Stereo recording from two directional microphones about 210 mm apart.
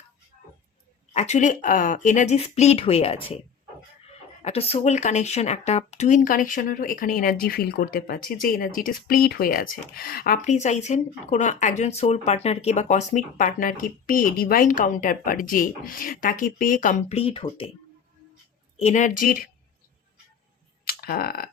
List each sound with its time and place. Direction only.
1.1 s speech: 35° left (ahead or behind)
4.4 s speech: 30° left (ahead or behind)
18.8 s speech: 35° left (ahead or behind)
20.8 s a sound: 45° left (ahead or behind)